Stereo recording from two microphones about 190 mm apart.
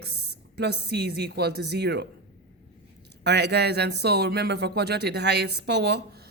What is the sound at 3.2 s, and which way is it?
Speech, 60° right (ahead or behind).